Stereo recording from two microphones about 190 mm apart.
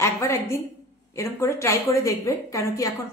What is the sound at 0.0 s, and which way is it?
A woman's voice, 15° left (ahead or behind).